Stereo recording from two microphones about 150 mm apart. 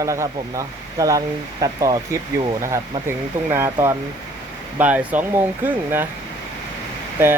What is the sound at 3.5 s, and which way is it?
Speech, 20° right (ahead or behind).